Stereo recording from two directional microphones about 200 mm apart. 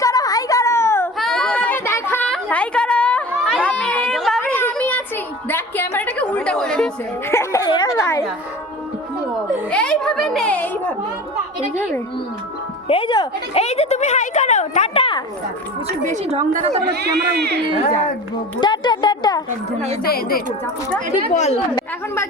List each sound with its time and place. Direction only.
0.0 s a sound: 15° left (ahead or behind)
8.0 s speech: 10° left (ahead or behind)
9.6 s a child's voice: 5° left (ahead or behind)
12.9 s speech: 25° left (ahead or behind)
16.0 s a woman's voice: 35° right (ahead or behind)
16.9 s speech: 55° right (ahead or behind)
18.6 s a sound: 20° left (ahead or behind)
19.5 s a woman's voice: 35° right (ahead or behind)
20.0 s speech: 50° left (ahead or behind)
21.3 s a woman's voice: 35° left (ahead or behind)
21.8 s a woman's voice: 15° left (ahead or behind)